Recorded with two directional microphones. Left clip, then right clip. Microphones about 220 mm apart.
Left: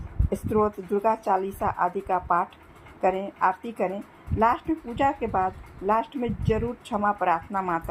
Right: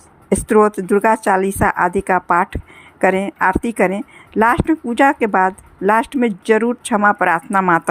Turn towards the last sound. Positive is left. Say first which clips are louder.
# right 12 dB
turn(degrees=-55)  # may be behind; listen again after turning